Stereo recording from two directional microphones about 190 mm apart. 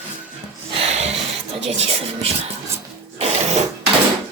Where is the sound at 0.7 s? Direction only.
30° right (ahead or behind).